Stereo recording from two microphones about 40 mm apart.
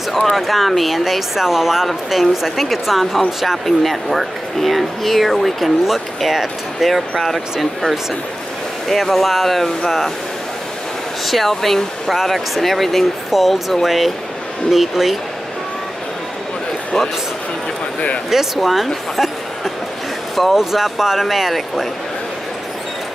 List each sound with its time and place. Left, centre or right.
0.1 s speech: centre
5.9 s speech: centre
6.9 s speech: centre
8.8 s speech: centre
11.2 s speech: centre
18.3 s speech: centre